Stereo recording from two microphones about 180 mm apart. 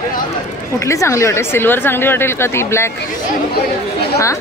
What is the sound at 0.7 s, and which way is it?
Speech, 15° left (ahead or behind).